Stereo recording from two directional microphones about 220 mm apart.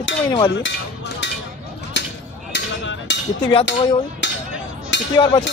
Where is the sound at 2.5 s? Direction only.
55° left (ahead or behind).